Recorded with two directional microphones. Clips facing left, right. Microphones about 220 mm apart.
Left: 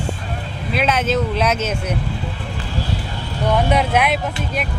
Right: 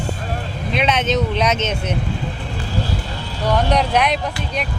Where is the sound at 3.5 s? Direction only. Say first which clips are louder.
Even; 5° left (ahead or behind).